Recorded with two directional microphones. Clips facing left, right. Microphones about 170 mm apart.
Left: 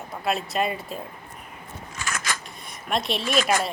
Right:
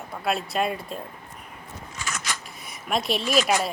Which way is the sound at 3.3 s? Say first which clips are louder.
Even; 50° left (ahead or behind).